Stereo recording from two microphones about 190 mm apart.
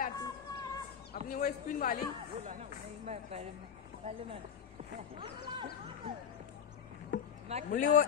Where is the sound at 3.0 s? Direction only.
35° right (ahead or behind).